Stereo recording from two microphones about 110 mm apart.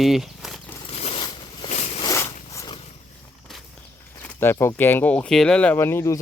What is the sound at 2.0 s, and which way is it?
Zipper, 25° left (ahead or behind).